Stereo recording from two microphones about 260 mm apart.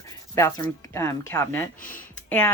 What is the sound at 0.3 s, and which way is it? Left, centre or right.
Speech, centre.